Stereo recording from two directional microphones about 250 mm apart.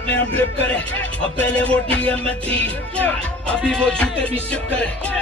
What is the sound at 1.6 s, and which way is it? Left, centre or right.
Music, centre.